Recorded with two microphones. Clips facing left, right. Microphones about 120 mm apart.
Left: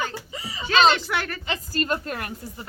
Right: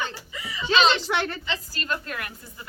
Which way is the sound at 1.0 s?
25° right (ahead or behind).